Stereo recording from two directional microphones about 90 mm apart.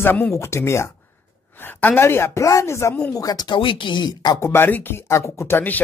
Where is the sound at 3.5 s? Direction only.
70° left (ahead or behind); by 4.4 s 50° left (ahead or behind).